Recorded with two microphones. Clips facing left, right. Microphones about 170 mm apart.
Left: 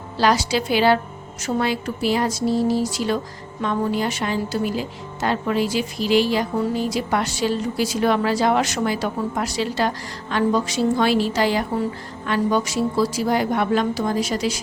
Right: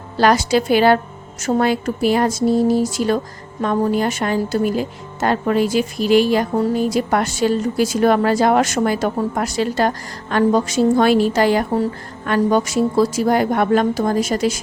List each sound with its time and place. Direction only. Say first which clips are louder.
0.2 s a woman's voice: right 4 dB; 50° right (ahead or behind)